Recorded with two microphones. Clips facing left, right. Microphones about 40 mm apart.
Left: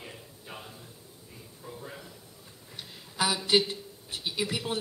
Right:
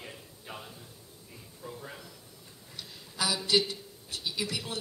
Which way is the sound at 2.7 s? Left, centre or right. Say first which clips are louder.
Left 4 dB; left.